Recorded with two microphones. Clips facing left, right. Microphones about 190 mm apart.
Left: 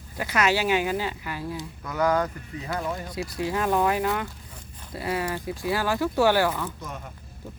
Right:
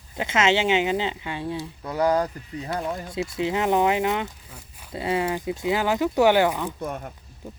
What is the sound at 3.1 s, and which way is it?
Speech, 25° right (ahead or behind).